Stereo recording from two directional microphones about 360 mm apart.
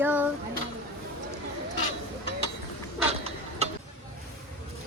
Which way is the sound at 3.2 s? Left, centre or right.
Centre.